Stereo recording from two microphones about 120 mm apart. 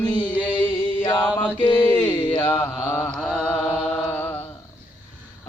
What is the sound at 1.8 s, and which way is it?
Mantra, 15° left (ahead or behind).